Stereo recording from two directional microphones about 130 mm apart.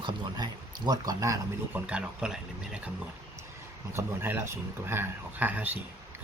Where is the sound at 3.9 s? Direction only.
20° right (ahead or behind).